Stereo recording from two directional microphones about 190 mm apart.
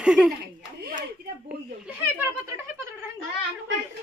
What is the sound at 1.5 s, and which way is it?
Speech, 10° right (ahead or behind).